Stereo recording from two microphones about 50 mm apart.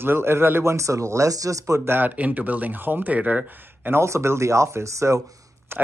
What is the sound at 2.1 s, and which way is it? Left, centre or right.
Speech, right.